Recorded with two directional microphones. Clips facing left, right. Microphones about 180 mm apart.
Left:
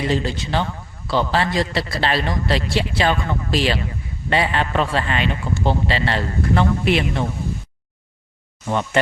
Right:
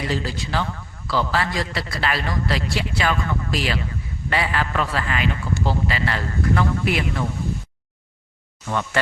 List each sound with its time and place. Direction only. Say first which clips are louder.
0.1 s a man's voice: left 4 dB; 25° left (ahead or behind)
8.6 s a man's voice: left 3 dB; 20° left (ahead or behind)